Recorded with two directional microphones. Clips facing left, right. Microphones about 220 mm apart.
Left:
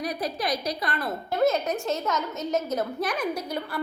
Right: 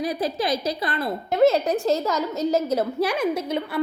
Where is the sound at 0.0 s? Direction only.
25° right (ahead or behind).